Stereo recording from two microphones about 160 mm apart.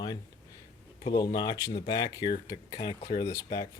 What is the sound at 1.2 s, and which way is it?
Speech, 25° left (ahead or behind).